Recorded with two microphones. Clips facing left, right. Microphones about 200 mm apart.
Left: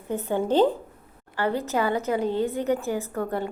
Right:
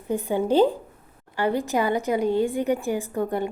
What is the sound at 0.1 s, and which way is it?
Speech, 10° right (ahead or behind).